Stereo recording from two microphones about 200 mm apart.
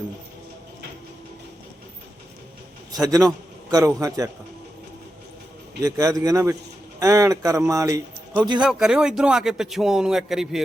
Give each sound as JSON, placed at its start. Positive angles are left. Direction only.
{"t": 2.9, "sound": "a man's voice", "side_deg": -20}
{"t": 5.8, "sound": "speech", "side_deg": -15}
{"t": 8.6, "sound": "a man's voice", "side_deg": -5}